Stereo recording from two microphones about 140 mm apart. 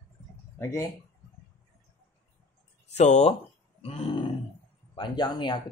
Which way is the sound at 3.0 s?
55° left (ahead or behind).